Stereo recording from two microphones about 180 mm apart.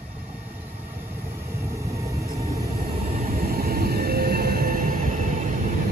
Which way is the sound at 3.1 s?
50° right (ahead or behind).